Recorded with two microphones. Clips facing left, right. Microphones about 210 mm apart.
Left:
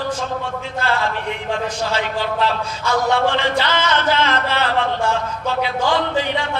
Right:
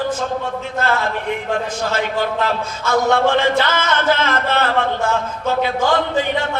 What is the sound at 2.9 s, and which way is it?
Speech, 45° right (ahead or behind).